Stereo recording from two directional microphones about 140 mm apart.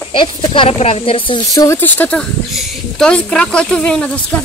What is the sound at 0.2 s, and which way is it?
Speech, 40° left (ahead or behind).